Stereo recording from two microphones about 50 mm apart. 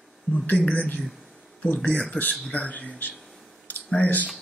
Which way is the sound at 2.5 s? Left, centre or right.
Left.